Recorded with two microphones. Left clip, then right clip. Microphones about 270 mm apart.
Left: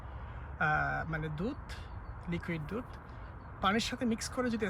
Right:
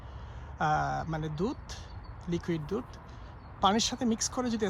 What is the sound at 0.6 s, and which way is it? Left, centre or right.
Speech, centre.